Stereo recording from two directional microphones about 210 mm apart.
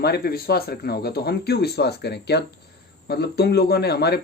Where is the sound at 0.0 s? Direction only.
50° left (ahead or behind).